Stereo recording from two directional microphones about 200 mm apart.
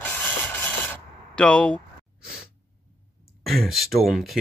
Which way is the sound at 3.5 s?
Centre (ahead or behind).